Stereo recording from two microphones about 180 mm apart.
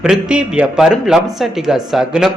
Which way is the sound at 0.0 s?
5° right (ahead or behind).